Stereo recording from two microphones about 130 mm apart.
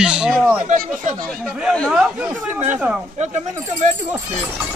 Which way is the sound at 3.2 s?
60° right (ahead or behind).